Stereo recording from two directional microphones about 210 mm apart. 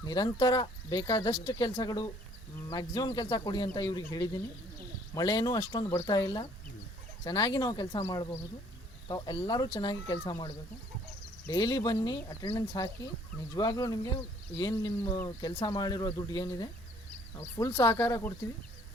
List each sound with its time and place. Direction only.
0.0 s speech: 20° left (ahead or behind)